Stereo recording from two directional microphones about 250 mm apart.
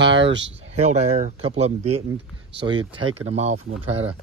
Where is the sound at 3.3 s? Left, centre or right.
Right.